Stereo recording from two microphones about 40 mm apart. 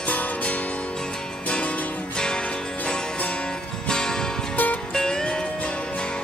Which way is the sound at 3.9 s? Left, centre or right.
Centre.